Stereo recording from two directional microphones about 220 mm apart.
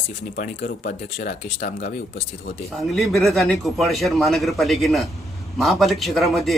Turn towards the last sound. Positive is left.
turn(degrees=0)  # may be behind; listen again after turning